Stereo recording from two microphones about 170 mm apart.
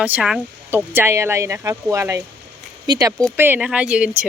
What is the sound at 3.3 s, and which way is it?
Speech, 10° right (ahead or behind).